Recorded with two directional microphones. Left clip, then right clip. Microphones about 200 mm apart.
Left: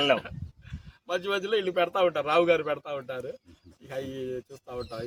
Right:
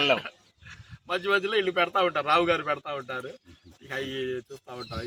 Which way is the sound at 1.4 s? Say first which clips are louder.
Right 1 dB; 55° left (ahead or behind).